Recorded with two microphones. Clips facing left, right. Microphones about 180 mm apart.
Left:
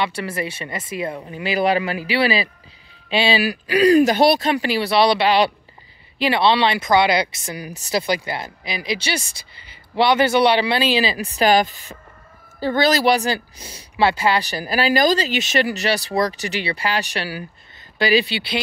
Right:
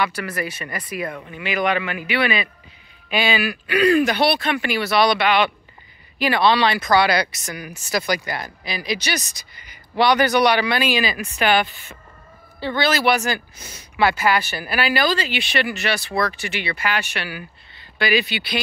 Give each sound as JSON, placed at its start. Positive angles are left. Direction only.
{"t": 0.0, "sound": "speech", "side_deg": 30}